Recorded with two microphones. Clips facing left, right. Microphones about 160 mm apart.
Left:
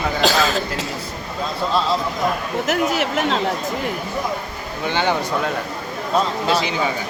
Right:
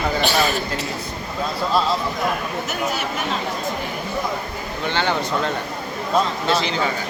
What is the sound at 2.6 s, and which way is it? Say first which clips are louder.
Speech: left 5 dB; 85° left.